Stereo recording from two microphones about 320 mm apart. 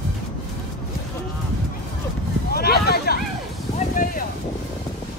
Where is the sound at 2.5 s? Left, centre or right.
Left.